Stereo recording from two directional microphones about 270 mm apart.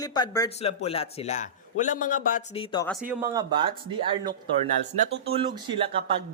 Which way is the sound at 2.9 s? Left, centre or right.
Centre.